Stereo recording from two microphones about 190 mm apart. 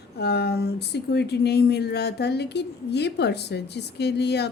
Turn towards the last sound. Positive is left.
turn(degrees=60)  # may be behind; listen again after turning